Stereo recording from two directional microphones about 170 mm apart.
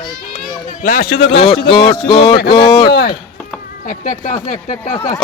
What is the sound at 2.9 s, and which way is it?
Speech, 65° left (ahead or behind).